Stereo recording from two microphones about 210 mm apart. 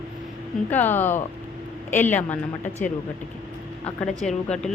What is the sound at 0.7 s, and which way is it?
Speech, 10° left (ahead or behind).